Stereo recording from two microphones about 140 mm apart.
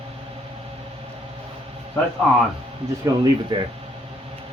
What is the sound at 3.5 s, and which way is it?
Speech, 40° right (ahead or behind).